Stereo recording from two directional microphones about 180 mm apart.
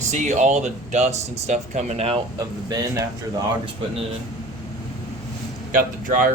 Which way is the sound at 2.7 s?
20° right (ahead or behind).